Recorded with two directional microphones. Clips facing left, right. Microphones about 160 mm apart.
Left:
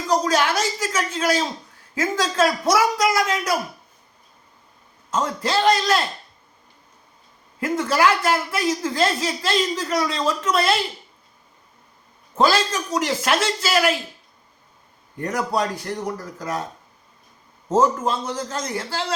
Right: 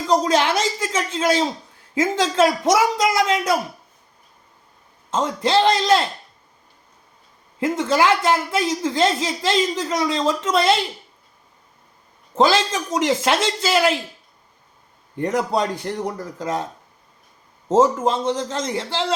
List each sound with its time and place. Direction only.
0.1 s speech: 25° right (ahead or behind)
5.1 s speech: 20° right (ahead or behind)
7.6 s speech: 25° right (ahead or behind)
12.3 s speech: 25° right (ahead or behind)
15.2 s speech: 25° right (ahead or behind)
17.7 s speech: 20° right (ahead or behind)